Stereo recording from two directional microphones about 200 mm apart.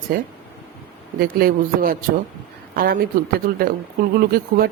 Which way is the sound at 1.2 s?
45° right (ahead or behind).